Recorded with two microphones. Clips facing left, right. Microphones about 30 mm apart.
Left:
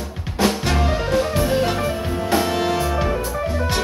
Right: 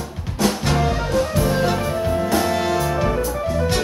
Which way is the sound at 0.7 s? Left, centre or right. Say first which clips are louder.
Even; centre.